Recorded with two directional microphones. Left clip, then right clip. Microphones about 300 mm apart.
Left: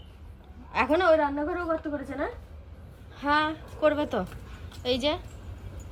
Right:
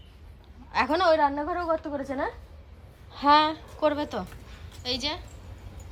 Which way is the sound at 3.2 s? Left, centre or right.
Centre.